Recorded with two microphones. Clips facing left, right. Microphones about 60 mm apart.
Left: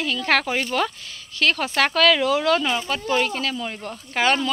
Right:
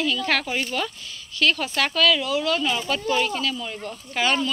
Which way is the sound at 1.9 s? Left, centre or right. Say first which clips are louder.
Left 2 dB; left.